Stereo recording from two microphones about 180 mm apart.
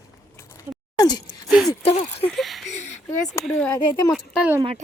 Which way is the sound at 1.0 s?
20° left (ahead or behind).